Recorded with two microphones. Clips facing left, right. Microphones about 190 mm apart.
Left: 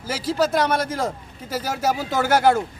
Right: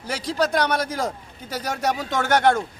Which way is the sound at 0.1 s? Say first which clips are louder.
Left 2 dB; 5° left (ahead or behind).